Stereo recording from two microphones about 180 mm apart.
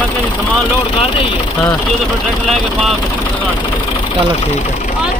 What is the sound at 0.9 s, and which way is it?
Speech, 30° left (ahead or behind).